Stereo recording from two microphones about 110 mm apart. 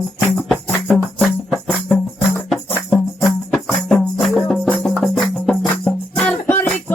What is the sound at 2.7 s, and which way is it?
Music, 20° left (ahead or behind).